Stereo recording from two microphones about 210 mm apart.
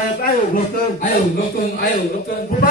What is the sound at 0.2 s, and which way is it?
A man's voice, 45° left (ahead or behind).